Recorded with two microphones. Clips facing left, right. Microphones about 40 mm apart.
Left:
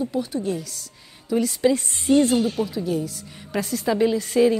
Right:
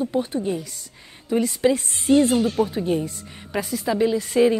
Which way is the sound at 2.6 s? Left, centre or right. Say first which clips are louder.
Right 3 dB; right.